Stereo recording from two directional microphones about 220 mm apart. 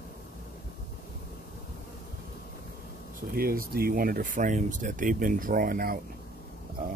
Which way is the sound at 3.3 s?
40° right (ahead or behind).